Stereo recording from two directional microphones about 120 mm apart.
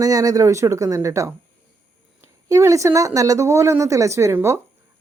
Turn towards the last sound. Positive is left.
turn(degrees=-25)  # may be behind; listen again after turning